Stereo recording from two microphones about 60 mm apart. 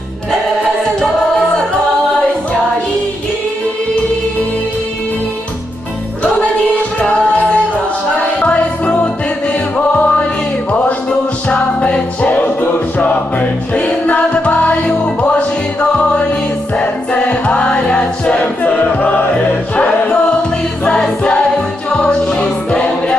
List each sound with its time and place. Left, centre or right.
0.9 s music: centre
7.0 s music: centre